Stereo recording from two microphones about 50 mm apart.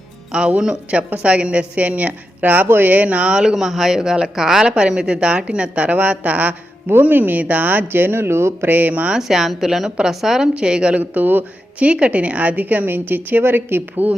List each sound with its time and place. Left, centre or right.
0.3 s a woman's voice: centre; by 2.6 s right
2.6 s speech: right
2.9 s a woman's voice: right
3.3 s a woman's voice: centre; by 8.7 s right
8.7 s speech: right
9.1 s a woman's voice: centre
10.9 s speech: right
11.8 s a woman's voice: right